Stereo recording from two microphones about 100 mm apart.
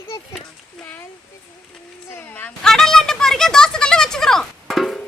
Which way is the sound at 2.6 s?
5° left (ahead or behind).